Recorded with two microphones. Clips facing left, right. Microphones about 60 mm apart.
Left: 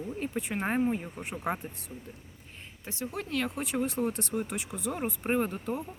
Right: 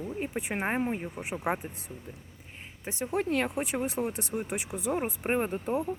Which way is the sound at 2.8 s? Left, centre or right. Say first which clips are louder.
Right 6 dB; right.